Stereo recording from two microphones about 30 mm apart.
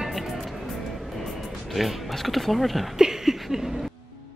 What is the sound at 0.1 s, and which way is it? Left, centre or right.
Music, centre.